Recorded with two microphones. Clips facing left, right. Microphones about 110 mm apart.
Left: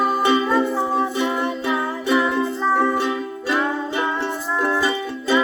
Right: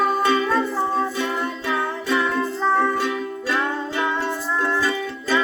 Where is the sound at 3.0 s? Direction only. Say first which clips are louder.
Left 1 dB; 20° left (ahead or behind).